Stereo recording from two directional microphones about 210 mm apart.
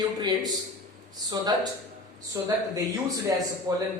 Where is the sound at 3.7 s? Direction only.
15° right (ahead or behind).